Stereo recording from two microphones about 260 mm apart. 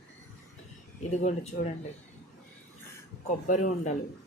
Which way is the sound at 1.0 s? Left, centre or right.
Left.